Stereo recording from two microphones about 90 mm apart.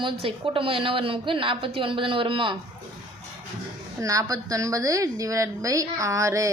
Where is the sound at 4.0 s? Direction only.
45° right (ahead or behind).